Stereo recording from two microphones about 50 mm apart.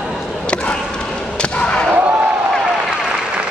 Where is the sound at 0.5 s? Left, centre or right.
Left.